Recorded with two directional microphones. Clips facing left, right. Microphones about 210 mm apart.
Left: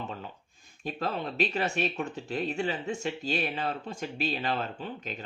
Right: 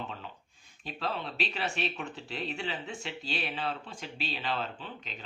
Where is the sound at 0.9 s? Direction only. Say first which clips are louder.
Left 4 dB; 45° left (ahead or behind).